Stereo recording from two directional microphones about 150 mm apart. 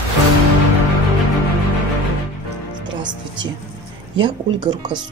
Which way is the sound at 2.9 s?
30° right (ahead or behind).